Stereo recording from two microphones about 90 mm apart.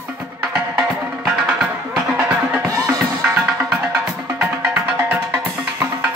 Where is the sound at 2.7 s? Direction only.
35° right (ahead or behind).